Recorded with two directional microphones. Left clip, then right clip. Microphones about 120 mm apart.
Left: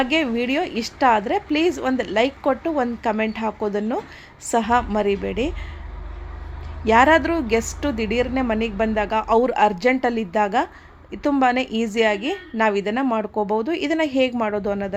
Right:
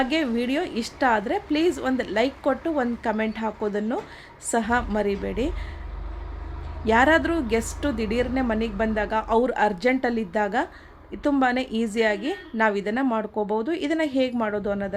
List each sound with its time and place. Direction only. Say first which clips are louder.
0.0 s a woman's voice: left 3 dB; 20° left (ahead or behind)
6.8 s a woman's voice: left 4 dB; 20° left (ahead or behind)